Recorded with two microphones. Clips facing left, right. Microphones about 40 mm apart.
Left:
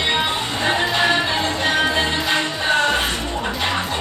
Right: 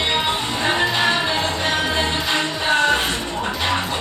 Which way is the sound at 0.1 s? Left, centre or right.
Centre.